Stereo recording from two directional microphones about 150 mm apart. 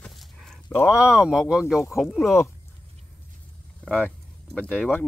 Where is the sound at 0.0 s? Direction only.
Centre (ahead or behind).